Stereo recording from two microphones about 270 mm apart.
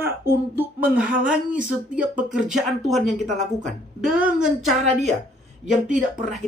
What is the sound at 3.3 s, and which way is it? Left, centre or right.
Speech, right.